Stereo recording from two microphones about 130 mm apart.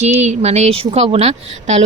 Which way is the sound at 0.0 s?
60° right (ahead or behind).